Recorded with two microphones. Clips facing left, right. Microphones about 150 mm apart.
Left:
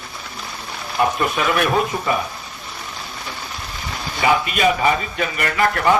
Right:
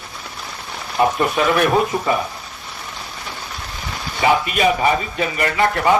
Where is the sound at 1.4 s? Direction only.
35° right (ahead or behind).